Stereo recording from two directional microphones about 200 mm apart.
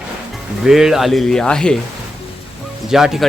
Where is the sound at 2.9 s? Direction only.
Centre (ahead or behind).